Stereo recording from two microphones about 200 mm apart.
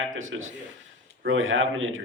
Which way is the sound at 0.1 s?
80° right.